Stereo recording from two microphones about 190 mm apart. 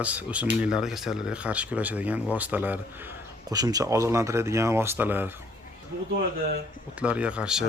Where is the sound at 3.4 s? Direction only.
20° right (ahead or behind).